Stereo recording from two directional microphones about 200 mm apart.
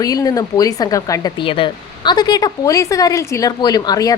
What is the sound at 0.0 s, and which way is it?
Speech, 20° left (ahead or behind).